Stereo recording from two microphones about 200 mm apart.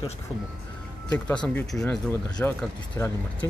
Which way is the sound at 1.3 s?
5° left (ahead or behind).